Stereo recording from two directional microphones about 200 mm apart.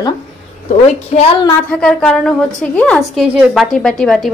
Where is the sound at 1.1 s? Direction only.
35° left (ahead or behind).